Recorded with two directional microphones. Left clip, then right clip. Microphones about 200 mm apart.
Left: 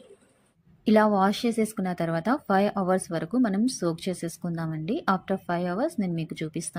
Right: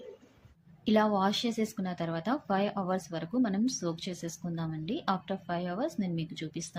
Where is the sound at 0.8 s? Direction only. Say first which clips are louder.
Left 6 dB; 25° left (ahead or behind).